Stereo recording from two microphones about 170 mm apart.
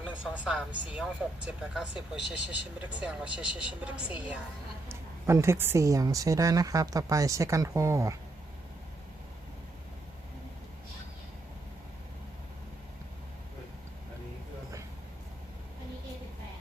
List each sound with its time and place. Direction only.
0.0 s speech: 5° right (ahead or behind)